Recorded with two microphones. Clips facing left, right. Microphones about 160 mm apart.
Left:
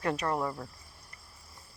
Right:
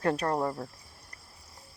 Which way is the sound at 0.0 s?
35° right (ahead or behind).